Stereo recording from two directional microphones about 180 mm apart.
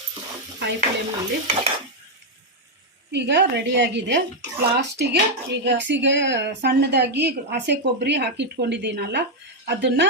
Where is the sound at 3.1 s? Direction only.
70° right (ahead or behind).